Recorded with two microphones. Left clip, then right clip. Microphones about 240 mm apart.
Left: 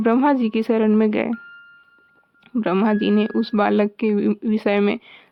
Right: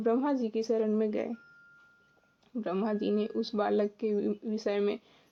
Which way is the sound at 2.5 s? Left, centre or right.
Left.